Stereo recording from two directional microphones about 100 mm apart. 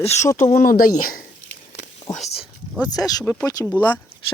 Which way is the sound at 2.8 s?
40° left (ahead or behind).